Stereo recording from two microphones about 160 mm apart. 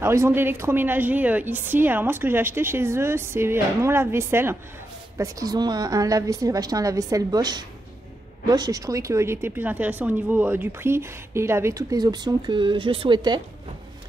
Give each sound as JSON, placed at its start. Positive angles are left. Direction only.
{"t": 0.0, "sound": "a woman's voice", "side_deg": -15}